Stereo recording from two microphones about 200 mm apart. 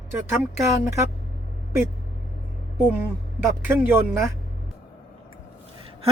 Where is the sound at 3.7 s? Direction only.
10° right (ahead or behind).